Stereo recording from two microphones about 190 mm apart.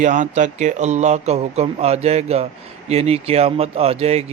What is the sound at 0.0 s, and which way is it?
Speech, 40° right (ahead or behind).